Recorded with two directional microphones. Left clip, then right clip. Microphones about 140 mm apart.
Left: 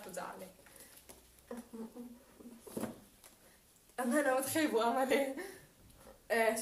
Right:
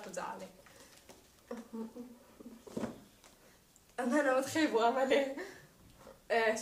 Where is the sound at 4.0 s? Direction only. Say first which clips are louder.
Right 2 dB; 25° left (ahead or behind).